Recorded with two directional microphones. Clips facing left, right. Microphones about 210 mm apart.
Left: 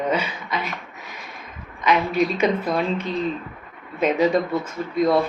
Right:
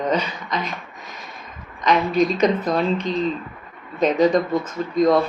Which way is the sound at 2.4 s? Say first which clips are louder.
Right 2 dB; 5° left (ahead or behind).